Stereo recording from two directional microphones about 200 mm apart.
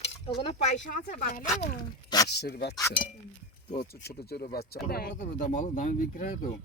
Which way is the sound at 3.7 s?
50° left (ahead or behind).